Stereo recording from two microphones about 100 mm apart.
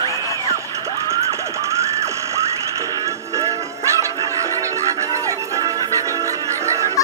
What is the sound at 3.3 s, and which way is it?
Music, 30° right (ahead or behind).